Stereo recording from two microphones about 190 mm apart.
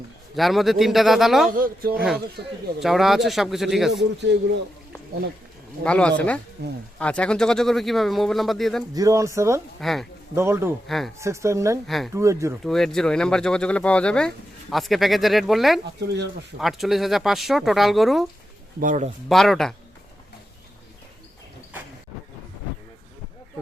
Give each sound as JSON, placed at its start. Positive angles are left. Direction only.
{"t": 0.3, "sound": "speech", "side_deg": 0}
{"t": 1.5, "sound": "speech", "side_deg": -50}
{"t": 2.0, "sound": "speech", "side_deg": -5}
{"t": 5.8, "sound": "speech", "side_deg": 5}
{"t": 9.0, "sound": "speech", "side_deg": -15}
{"t": 9.8, "sound": "speech", "side_deg": 0}
{"t": 10.3, "sound": "speech", "side_deg": -15}
{"t": 10.8, "sound": "speech", "side_deg": 0}
{"t": 11.2, "sound": "speech", "side_deg": -15}
{"t": 11.9, "sound": "speech", "side_deg": 0}
{"t": 12.1, "sound": "speech", "side_deg": -15}
{"t": 12.6, "sound": "speech", "side_deg": 0}
{"t": 18.8, "sound": "speech", "side_deg": -40}
{"t": 19.3, "sound": "speech", "side_deg": 0}